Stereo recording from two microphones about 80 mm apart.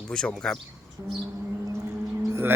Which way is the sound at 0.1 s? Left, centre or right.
Centre.